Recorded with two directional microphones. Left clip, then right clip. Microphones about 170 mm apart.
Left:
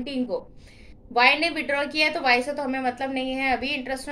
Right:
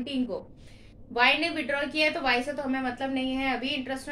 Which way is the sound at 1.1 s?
25° left (ahead or behind).